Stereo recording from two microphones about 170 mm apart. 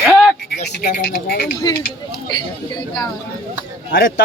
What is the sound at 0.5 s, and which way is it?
Speech, 65° left (ahead or behind).